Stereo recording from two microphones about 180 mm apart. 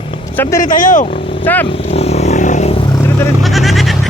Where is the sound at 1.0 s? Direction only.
30° left (ahead or behind).